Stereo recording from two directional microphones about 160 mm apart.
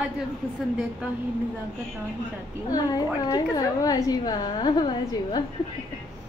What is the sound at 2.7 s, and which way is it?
A woman's voice, 25° left (ahead or behind).